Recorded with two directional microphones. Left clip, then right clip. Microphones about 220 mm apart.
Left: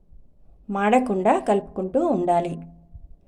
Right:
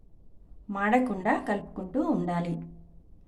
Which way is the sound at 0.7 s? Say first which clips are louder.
Left 6 dB; 25° left (ahead or behind).